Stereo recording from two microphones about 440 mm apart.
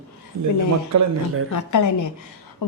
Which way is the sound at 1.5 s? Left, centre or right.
Left.